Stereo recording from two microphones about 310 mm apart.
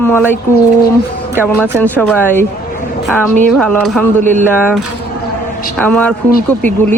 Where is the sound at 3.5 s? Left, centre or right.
Centre.